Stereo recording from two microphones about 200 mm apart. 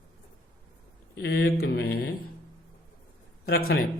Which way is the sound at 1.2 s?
50° left (ahead or behind).